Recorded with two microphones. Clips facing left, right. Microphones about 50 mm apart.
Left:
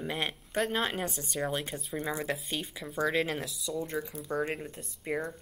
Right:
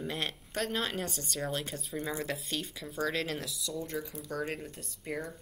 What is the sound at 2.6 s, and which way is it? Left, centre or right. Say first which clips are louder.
Speech: left 3 dB; centre.